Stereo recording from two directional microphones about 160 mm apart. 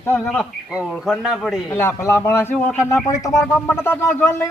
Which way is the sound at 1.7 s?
15° left (ahead or behind).